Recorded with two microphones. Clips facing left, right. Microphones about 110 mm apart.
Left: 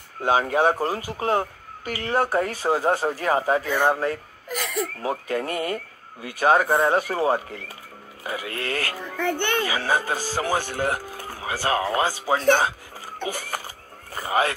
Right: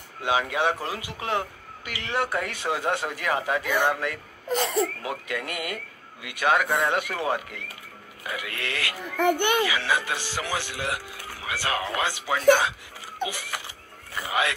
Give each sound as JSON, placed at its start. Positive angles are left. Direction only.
{"t": 0.2, "sound": "speech", "side_deg": 40}
{"t": 4.5, "sound": "speech", "side_deg": -30}
{"t": 5.0, "sound": "speech", "side_deg": 35}
{"t": 9.2, "sound": "a child's voice", "side_deg": -15}
{"t": 9.6, "sound": "speech", "side_deg": 40}
{"t": 13.3, "sound": "a sound", "side_deg": 45}
{"t": 14.1, "sound": "speech", "side_deg": 40}